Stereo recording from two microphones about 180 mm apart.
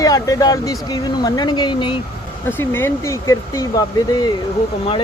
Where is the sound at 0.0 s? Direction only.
20° left (ahead or behind).